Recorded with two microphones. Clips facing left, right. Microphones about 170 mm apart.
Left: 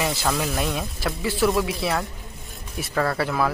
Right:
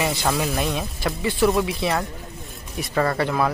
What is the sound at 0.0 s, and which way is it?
Speech, centre (ahead or behind).